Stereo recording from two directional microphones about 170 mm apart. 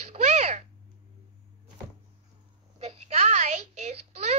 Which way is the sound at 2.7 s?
40° right (ahead or behind).